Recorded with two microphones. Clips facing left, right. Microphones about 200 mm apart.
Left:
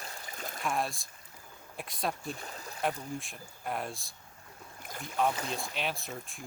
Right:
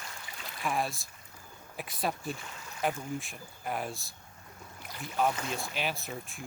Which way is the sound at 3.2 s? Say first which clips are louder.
Right 1 dB; centre (ahead or behind).